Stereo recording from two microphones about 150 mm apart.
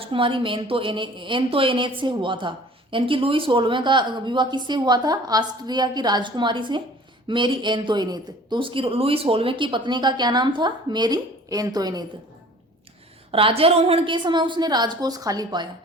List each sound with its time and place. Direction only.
0.0 s speech: 35° right (ahead or behind)
13.3 s speech: 40° right (ahead or behind)